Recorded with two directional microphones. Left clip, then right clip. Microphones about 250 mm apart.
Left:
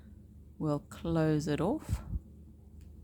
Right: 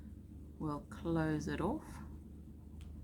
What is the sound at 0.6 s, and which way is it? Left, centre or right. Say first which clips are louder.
Speech: left 6 dB; left.